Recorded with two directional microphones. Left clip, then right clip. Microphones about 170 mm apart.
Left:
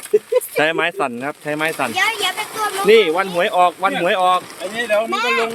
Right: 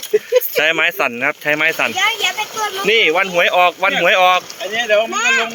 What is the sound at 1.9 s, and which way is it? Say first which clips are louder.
Speech: right 2 dB; 20° left (ahead or behind).